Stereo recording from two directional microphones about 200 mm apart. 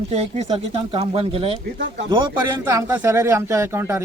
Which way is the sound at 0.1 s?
30° right (ahead or behind).